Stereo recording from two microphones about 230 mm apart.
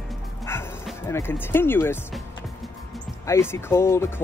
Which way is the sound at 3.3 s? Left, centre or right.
Centre.